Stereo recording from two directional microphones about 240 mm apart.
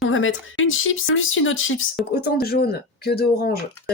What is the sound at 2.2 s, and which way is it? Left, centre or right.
Speech, left.